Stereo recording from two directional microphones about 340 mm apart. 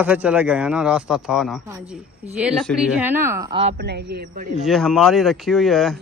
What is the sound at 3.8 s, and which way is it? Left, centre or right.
Speech, right.